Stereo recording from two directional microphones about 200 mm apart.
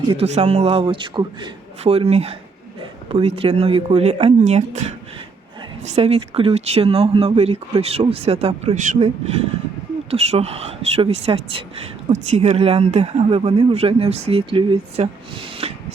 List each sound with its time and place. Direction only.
0.1 s speech: 30° right (ahead or behind)
10.1 s speech: 30° right (ahead or behind)